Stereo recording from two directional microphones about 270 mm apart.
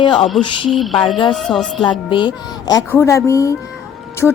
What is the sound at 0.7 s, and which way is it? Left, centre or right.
Music, centre.